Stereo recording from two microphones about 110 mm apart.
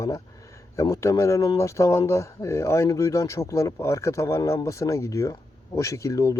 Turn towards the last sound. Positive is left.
turn(degrees=30)  # may be behind; listen again after turning